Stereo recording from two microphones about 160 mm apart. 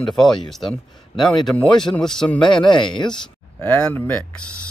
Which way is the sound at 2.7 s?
30° left (ahead or behind).